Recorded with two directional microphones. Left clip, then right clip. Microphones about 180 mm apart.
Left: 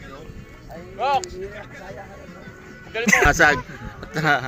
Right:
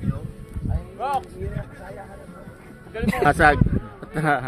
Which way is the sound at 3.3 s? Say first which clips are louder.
Even; 55° right (ahead or behind).